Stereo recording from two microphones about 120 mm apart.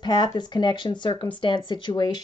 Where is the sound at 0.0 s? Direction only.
40° left (ahead or behind).